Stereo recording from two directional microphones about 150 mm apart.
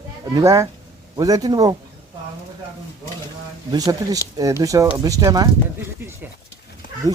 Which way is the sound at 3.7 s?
25° right (ahead or behind).